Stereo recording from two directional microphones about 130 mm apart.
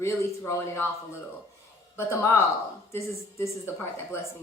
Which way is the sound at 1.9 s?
20° left (ahead or behind).